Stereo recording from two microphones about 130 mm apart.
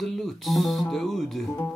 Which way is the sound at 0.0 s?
Centre (ahead or behind).